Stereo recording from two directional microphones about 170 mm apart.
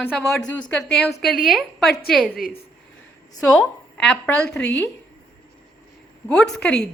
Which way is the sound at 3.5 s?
5° left (ahead or behind).